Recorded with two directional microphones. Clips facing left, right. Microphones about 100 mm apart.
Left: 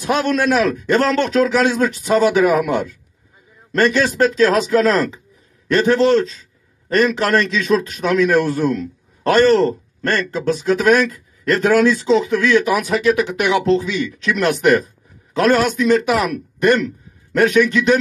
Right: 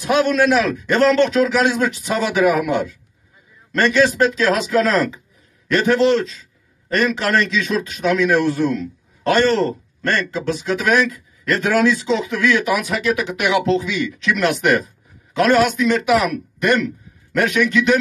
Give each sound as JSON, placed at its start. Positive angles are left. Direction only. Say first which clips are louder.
{"t": 0.0, "sound": "a man's voice", "louder": "right 1 dB", "side_deg": 40}